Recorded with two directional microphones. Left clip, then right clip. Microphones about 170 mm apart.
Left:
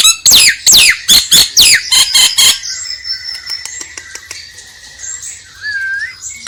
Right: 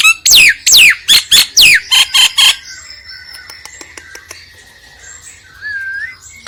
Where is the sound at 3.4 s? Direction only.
20° right (ahead or behind).